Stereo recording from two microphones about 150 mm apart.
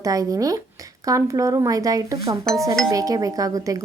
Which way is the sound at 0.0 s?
25° right (ahead or behind).